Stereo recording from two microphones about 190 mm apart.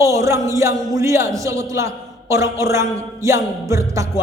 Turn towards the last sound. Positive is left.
turn(degrees=-15)  # may be behind; listen again after turning